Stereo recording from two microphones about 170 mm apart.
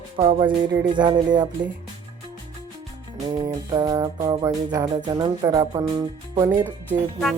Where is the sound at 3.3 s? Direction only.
25° right (ahead or behind).